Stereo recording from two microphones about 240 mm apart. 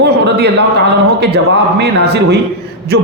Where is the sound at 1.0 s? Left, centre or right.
Right.